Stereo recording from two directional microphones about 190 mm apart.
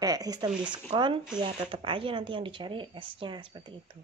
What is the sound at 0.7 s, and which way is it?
A woman's voice, 25° right (ahead or behind).